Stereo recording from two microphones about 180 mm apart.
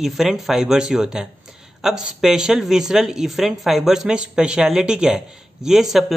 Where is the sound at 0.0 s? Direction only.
Centre (ahead or behind).